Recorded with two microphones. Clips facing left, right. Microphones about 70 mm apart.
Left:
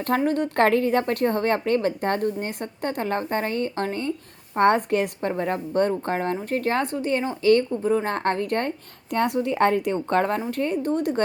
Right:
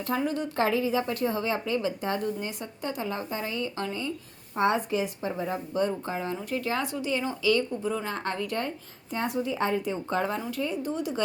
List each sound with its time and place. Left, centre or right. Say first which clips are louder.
0.3 s a woman's voice: left 8 dB; left
9.1 s a woman's voice: left 7 dB; left